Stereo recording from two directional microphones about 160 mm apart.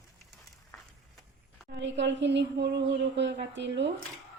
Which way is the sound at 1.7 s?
90° right.